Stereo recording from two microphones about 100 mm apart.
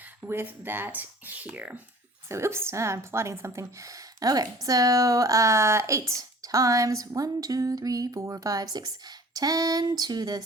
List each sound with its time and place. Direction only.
0.3 s speech: 20° right (ahead or behind)
2.3 s a woman's voice: 25° right (ahead or behind); by 10.4 s 40° right (ahead or behind)